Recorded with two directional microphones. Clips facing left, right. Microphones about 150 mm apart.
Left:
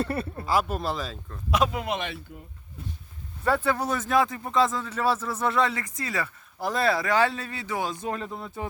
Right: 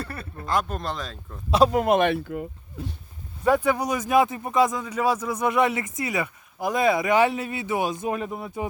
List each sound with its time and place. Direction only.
0.0 s speech: 25° left (ahead or behind)
0.4 s speech: 5° left (ahead or behind)
1.5 s speech: 30° right (ahead or behind)
1.7 s speech: 50° right (ahead or behind); by 2.9 s 80° right
3.4 s speech: 15° right (ahead or behind)